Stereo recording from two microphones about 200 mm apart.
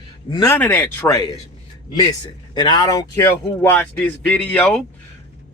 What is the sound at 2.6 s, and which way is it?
A man's voice, 20° left (ahead or behind).